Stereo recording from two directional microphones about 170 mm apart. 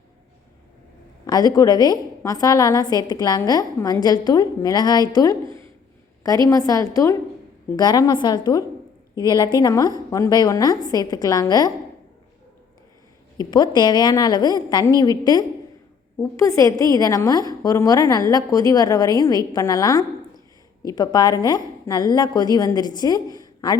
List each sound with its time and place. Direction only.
1.3 s a woman's voice: 20° left (ahead or behind)
13.3 s a woman's voice: 25° left (ahead or behind)